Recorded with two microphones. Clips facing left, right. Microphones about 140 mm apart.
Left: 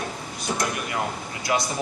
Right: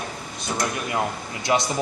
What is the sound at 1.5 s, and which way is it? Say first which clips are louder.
Speech: right 3 dB; 25° right (ahead or behind).